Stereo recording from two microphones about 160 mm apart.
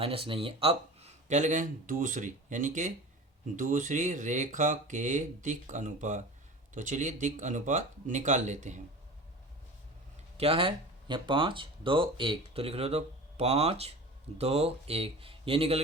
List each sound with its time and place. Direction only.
0.0 s speech: 35° right (ahead or behind)
10.3 s speech: 35° right (ahead or behind)